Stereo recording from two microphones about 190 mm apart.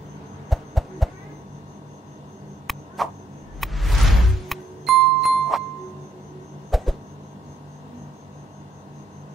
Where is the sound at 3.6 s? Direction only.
Centre (ahead or behind).